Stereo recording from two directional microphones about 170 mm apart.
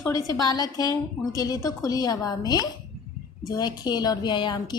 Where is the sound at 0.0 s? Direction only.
20° left (ahead or behind).